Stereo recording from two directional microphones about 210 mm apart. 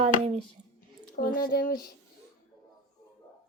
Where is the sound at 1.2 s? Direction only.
45° left (ahead or behind).